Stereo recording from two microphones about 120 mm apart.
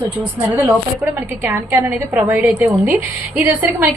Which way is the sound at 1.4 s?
20° right (ahead or behind).